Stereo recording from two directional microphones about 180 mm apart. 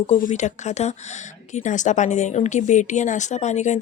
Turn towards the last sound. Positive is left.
turn(degrees=40)  # may be behind; listen again after turning